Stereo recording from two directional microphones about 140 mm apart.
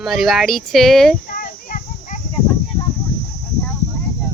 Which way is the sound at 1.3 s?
85° left.